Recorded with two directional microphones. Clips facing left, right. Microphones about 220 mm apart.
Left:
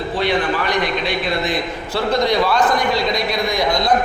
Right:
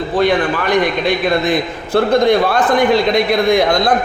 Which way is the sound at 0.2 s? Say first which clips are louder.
Right 5 dB; 50° right (ahead or behind).